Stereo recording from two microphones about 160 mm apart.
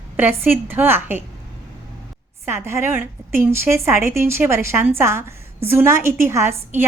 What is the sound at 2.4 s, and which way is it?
A woman's voice, 15° right (ahead or behind).